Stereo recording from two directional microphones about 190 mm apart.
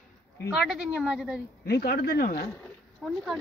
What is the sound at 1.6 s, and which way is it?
Speech, 55° left (ahead or behind).